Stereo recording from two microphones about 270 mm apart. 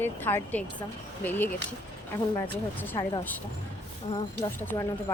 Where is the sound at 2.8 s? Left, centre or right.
Centre.